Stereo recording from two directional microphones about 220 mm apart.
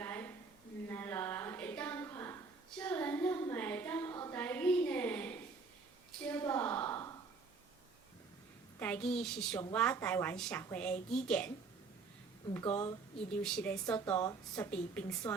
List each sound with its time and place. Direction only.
0.0 s a sound: 10° left (ahead or behind)
8.8 s a woman's voice: 5° left (ahead or behind)
12.5 s a woman's voice: 5° left (ahead or behind)